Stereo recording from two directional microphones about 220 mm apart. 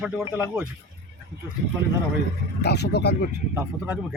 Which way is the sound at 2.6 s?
50° left (ahead or behind).